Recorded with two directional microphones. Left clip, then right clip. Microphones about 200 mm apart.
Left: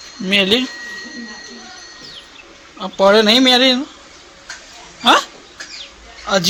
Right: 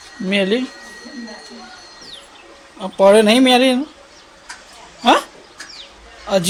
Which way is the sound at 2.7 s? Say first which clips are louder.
Right 1 dB; 10° right (ahead or behind).